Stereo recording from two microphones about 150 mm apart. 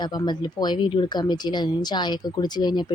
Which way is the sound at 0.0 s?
30° left (ahead or behind).